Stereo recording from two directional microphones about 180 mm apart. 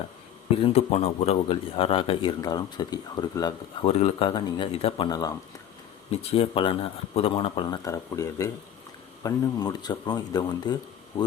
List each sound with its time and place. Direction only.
0.6 s a man's voice: 35° left (ahead or behind)